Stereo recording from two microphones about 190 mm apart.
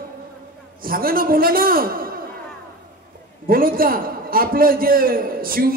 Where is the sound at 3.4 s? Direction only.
50° right (ahead or behind).